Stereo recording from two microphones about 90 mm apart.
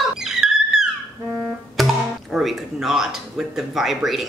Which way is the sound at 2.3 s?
Centre (ahead or behind).